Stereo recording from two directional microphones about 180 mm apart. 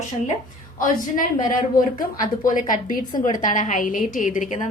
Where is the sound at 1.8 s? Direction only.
50° left (ahead or behind).